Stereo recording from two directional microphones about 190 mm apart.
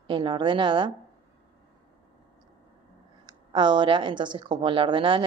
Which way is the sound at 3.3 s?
25° right (ahead or behind).